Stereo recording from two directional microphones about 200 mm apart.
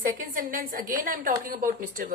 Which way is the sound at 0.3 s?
45° right (ahead or behind).